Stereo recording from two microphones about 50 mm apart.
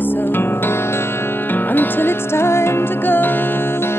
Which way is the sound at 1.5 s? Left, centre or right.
Left.